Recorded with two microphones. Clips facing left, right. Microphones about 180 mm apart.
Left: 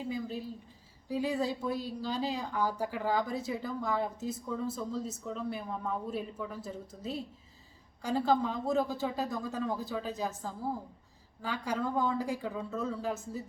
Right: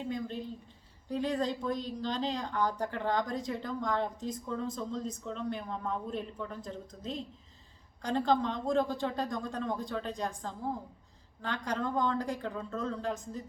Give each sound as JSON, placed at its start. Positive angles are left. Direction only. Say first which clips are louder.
{"t": 0.0, "sound": "speech", "louder": "even", "side_deg": 5}